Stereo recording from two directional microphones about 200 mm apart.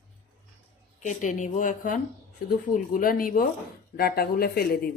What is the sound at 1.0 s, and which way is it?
A woman's voice, 40° left (ahead or behind).